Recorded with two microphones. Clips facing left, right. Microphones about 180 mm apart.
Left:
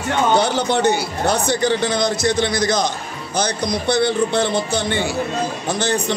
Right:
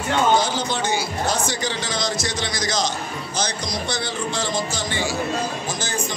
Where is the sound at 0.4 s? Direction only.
65° left (ahead or behind).